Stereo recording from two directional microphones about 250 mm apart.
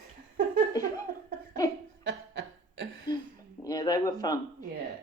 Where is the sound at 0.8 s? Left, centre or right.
Centre.